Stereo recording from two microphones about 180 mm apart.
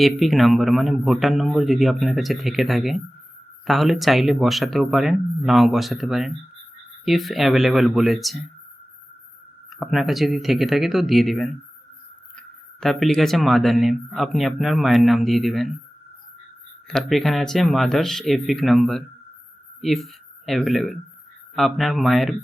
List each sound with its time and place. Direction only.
0.0 s speech: centre (ahead or behind)
9.7 s speech: centre (ahead or behind)
16.9 s speech: centre (ahead or behind)